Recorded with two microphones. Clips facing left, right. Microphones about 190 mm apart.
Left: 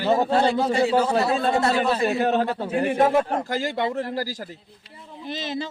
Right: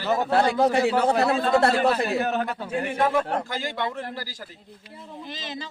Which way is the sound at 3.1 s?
45° left (ahead or behind).